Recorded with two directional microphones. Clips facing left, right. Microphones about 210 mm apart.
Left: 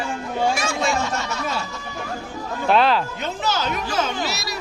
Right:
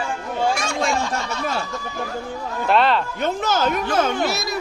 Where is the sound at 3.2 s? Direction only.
50° right (ahead or behind).